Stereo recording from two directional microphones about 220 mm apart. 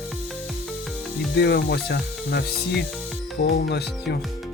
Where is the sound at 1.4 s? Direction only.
45° left (ahead or behind).